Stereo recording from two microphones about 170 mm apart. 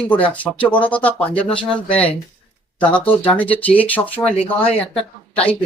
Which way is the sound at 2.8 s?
10° left (ahead or behind).